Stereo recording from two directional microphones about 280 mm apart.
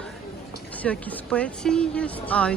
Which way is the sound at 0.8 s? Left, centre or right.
Centre.